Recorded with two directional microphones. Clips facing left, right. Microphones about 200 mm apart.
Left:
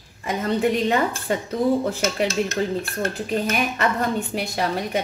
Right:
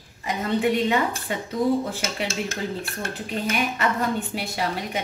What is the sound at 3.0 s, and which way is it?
A woman's voice, 45° left (ahead or behind).